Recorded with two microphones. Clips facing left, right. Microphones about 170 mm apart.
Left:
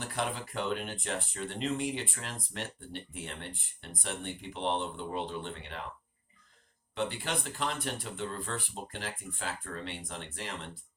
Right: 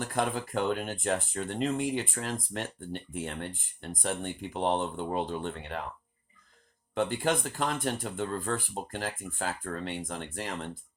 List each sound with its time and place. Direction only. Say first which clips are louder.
0.0 s speech: right 5 dB; 45° right (ahead or behind)
6.9 s speech: right 6 dB; 50° right (ahead or behind)